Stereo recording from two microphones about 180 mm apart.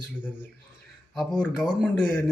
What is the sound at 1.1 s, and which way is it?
Speech, 5° left (ahead or behind).